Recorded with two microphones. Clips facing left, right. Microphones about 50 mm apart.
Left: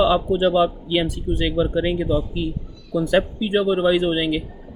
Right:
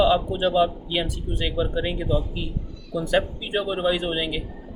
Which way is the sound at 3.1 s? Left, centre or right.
Left.